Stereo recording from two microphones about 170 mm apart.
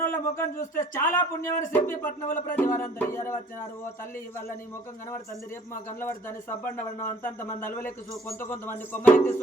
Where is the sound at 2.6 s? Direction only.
15° left (ahead or behind).